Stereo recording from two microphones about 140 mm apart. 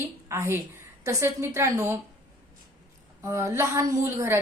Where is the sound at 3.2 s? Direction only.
20° right (ahead or behind).